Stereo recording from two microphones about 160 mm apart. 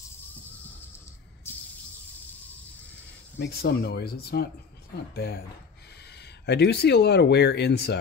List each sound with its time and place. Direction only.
3.3 s speech: 90° left
6.4 s speech: 90° left